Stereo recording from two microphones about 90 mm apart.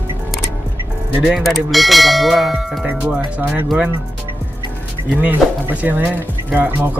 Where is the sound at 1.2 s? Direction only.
5° right (ahead or behind).